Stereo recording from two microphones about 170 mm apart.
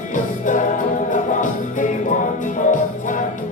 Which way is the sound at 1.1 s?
50° left (ahead or behind).